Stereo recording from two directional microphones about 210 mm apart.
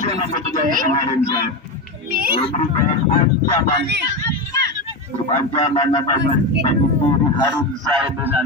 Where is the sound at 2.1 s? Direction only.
45° right (ahead or behind).